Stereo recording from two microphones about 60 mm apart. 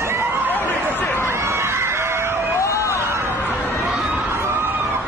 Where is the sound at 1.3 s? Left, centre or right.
Right.